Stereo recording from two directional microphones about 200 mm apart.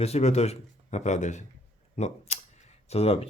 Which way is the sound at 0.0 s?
30° left (ahead or behind).